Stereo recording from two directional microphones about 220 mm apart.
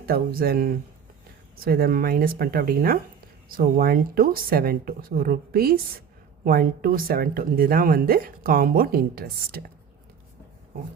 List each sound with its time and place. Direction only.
0.0 s a woman's voice: 45° right (ahead or behind)